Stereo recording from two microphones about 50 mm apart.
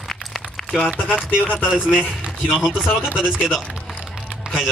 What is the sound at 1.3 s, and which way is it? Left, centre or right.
Speech, left.